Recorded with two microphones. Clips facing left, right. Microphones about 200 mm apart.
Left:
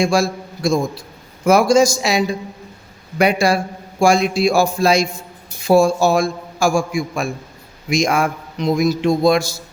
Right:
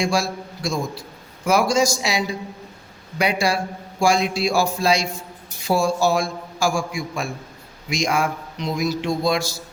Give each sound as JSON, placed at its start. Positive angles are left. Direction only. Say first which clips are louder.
{"t": 0.0, "sound": "a man's voice", "louder": "left 5 dB", "side_deg": 50}